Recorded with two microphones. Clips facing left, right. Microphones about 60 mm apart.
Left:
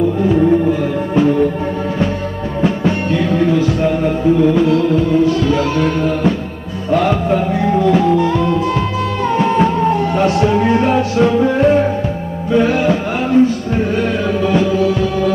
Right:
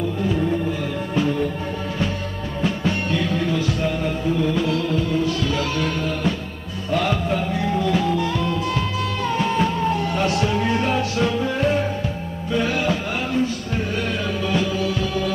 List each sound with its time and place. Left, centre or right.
0.2 s music: left
2.6 s music: left